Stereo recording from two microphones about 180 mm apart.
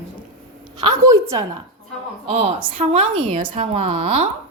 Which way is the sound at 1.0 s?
15° right (ahead or behind).